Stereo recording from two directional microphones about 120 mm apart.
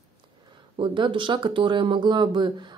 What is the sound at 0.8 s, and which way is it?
Speech, 45° right (ahead or behind).